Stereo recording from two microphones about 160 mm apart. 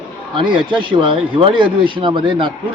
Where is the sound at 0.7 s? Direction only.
30° right (ahead or behind).